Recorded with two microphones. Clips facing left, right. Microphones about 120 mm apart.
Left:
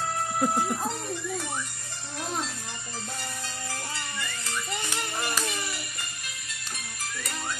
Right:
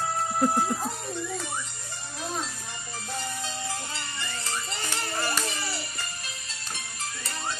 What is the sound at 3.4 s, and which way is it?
Music, 20° right (ahead or behind).